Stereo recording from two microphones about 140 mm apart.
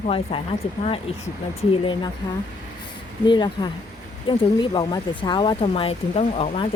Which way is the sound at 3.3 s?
35° left (ahead or behind).